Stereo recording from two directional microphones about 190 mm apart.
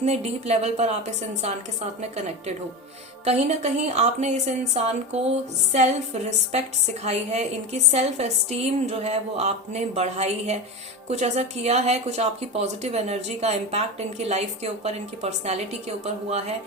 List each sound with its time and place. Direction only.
0.0 s a woman's voice: 35° right (ahead or behind)